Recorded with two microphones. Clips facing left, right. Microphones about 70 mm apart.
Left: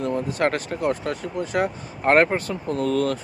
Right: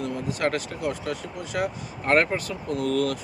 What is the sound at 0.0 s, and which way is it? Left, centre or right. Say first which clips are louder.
Speech: left 4 dB; left.